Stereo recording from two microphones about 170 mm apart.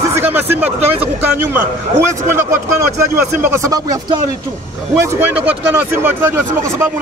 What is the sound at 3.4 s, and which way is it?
Speech, 15° right (ahead or behind).